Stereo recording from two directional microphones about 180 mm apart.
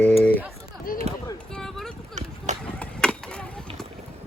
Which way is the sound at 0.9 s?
50° left (ahead or behind).